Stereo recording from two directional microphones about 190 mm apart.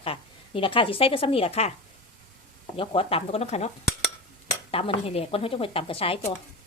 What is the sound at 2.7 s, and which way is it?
Speech, 30° left (ahead or behind).